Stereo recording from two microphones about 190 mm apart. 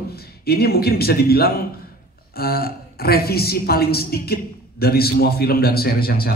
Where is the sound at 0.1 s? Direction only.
55° left (ahead or behind).